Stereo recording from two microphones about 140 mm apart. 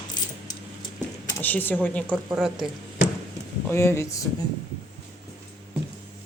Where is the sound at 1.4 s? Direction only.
15° left (ahead or behind).